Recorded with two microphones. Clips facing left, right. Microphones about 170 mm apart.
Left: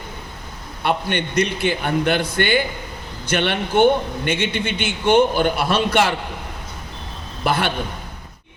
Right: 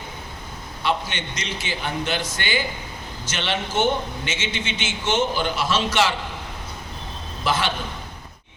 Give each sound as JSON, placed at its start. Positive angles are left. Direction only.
{"t": 0.8, "sound": "a man's voice", "side_deg": 55}
{"t": 7.4, "sound": "a man's voice", "side_deg": 55}